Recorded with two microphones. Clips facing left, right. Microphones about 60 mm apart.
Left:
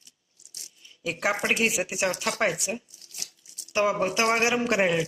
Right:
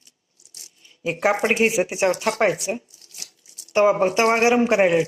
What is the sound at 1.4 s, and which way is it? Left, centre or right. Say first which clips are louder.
Speech: right 6 dB; right.